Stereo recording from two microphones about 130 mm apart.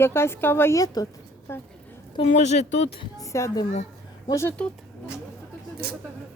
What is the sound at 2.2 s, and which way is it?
Speech, 60° left (ahead or behind).